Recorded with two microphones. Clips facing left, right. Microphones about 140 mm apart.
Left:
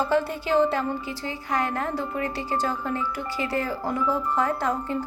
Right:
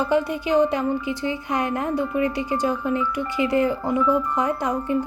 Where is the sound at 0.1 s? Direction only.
15° right (ahead or behind).